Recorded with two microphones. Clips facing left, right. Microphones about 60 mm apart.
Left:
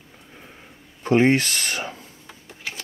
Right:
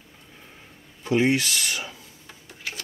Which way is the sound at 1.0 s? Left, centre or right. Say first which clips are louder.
Left 4 dB; left.